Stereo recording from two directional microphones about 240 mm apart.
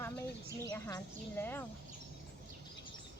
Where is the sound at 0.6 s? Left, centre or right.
Centre.